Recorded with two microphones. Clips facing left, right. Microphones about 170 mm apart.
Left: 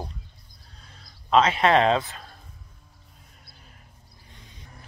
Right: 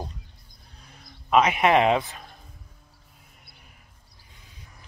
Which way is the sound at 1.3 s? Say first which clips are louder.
Even; 15° right (ahead or behind).